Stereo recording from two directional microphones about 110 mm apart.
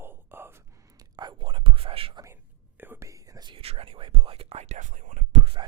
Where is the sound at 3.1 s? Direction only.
30° right (ahead or behind).